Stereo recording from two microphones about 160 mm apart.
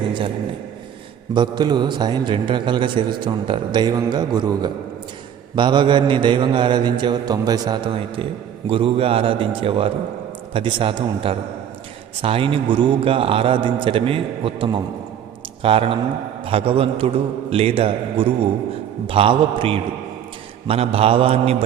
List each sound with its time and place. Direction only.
1.3 s mantra: 30° right (ahead or behind)
9.6 s a man's voice: 35° right (ahead or behind)